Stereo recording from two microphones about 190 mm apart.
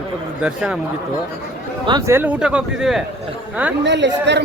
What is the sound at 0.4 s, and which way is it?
Speech, 5° right (ahead or behind).